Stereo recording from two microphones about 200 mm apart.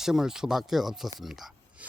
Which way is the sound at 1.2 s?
Centre (ahead or behind).